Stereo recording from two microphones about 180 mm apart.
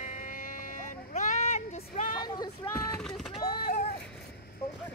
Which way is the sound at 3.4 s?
40° left (ahead or behind).